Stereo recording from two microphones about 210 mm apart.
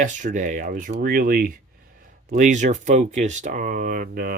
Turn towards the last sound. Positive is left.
turn(degrees=-45)  # may be behind; listen again after turning